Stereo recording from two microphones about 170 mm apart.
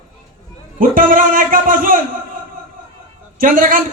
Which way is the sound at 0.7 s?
55° right (ahead or behind).